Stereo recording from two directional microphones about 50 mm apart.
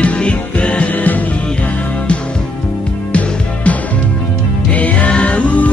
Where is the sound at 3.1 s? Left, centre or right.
Left.